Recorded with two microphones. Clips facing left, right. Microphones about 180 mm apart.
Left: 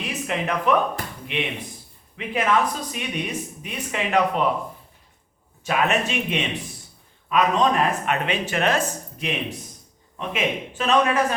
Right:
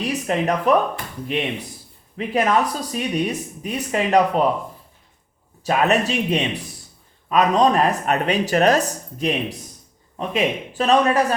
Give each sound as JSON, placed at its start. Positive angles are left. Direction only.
{"t": 0.0, "sound": "speech", "side_deg": -40}
{"t": 5.6, "sound": "speech", "side_deg": -35}